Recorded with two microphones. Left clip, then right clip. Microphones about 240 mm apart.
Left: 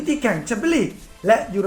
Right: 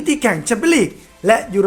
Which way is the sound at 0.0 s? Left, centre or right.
Right.